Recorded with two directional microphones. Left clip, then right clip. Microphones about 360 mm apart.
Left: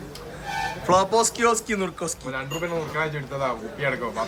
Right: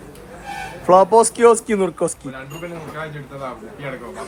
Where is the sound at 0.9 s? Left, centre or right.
Centre.